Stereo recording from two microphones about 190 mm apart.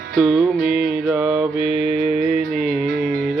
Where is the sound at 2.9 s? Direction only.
50° right (ahead or behind).